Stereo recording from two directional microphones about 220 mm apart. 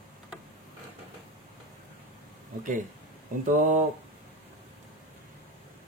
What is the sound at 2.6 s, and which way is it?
Speech, 35° right (ahead or behind).